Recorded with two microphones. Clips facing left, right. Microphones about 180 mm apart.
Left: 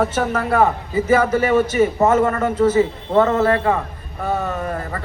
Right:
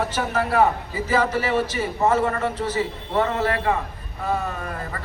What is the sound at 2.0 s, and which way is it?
A man's voice, 45° left (ahead or behind).